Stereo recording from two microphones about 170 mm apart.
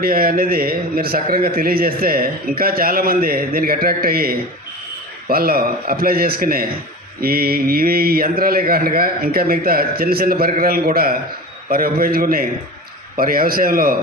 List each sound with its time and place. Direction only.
0.0 s a man's voice: 60° right (ahead or behind)